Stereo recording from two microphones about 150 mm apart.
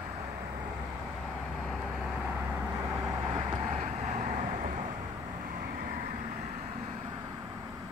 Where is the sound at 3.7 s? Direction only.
45° right (ahead or behind).